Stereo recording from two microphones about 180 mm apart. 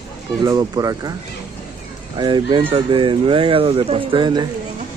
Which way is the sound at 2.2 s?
25° right (ahead or behind).